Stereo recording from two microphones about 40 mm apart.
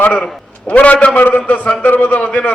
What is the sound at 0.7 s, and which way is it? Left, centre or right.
A man's voice, left.